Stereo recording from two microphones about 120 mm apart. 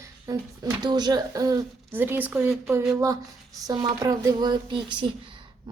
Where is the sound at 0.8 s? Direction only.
35° right (ahead or behind).